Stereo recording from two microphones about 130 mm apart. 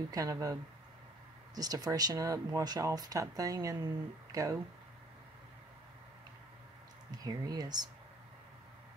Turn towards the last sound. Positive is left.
turn(degrees=-30)  # may be behind; listen again after turning